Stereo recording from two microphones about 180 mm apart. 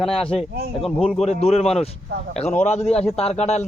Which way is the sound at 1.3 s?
35° left (ahead or behind).